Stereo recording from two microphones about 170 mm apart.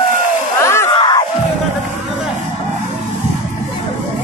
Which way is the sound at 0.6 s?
15° left (ahead or behind).